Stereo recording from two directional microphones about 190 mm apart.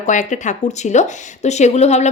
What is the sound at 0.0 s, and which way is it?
A woman's voice, 40° left (ahead or behind).